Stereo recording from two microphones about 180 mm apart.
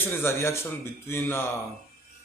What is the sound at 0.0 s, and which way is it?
Speech, 15° left (ahead or behind).